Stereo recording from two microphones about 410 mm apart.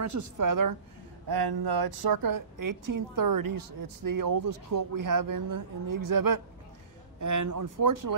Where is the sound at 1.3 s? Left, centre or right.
Right.